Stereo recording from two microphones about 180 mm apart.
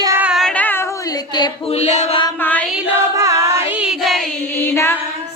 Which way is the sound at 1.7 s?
40° left (ahead or behind).